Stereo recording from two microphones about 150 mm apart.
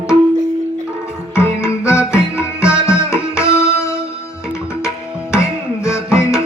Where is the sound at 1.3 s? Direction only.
20° left (ahead or behind).